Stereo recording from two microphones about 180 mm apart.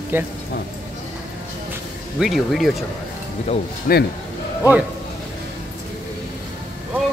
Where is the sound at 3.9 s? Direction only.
50° left (ahead or behind).